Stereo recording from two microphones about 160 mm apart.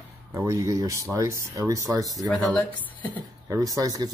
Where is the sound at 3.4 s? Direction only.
20° right (ahead or behind).